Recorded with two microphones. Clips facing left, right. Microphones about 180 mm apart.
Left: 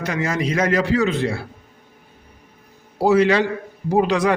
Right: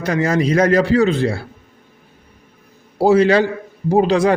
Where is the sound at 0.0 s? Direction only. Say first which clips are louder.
Right 5 dB; 35° right (ahead or behind).